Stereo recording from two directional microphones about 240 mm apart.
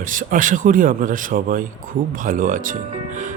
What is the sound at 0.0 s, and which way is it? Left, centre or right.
A man's voice, right.